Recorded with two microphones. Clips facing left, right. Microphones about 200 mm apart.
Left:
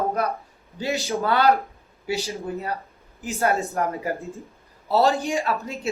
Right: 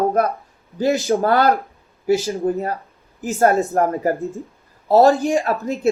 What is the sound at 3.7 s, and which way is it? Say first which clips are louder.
A man's voice: right 7 dB; 45° right (ahead or behind).